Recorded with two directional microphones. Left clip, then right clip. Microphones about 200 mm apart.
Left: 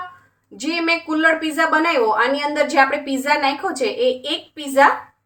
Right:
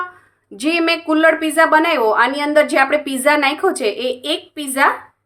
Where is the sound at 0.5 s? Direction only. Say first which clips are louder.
Right 3 dB; 45° right (ahead or behind).